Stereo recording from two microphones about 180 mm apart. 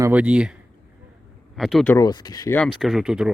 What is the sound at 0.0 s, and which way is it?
Speech, 10° right (ahead or behind).